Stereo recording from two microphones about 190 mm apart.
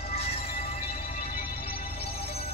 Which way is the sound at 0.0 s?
30° left (ahead or behind).